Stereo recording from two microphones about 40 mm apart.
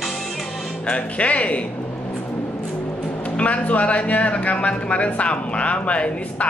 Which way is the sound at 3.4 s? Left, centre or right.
Left.